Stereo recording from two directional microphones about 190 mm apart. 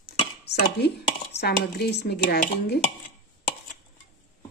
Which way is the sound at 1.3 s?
60° left (ahead or behind).